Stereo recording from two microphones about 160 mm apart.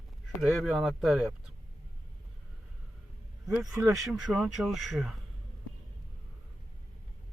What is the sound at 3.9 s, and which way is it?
Speech, 5° right (ahead or behind).